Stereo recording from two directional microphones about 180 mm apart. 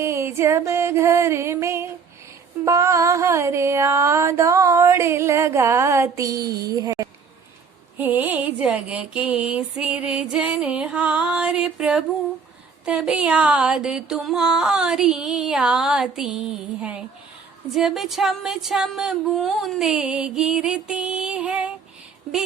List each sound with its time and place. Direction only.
0.0 s music: 15° right (ahead or behind)